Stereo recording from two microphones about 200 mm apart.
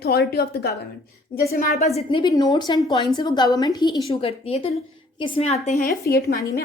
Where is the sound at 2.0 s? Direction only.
25° left (ahead or behind).